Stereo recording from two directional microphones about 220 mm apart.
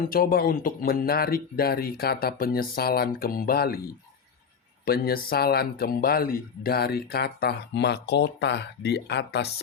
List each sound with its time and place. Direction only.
0.1 s speech: 40° left (ahead or behind)
4.9 s speech: 45° left (ahead or behind)